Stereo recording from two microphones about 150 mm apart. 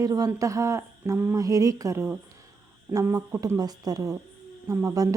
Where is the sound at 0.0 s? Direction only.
25° right (ahead or behind).